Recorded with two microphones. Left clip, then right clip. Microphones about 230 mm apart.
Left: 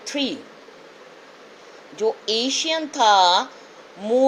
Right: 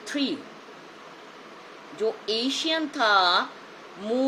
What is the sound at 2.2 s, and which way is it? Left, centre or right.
A woman's voice, left.